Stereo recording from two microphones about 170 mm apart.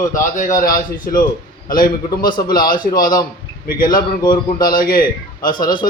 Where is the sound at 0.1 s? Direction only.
50° left (ahead or behind).